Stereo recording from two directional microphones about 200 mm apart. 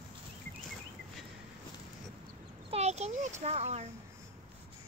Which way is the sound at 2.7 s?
35° right (ahead or behind).